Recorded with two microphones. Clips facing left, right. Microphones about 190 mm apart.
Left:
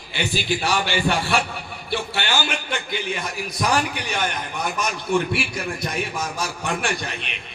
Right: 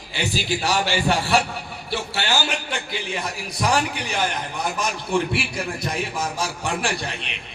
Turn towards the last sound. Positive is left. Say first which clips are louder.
# even
turn(degrees=-30)  # may be behind; listen again after turning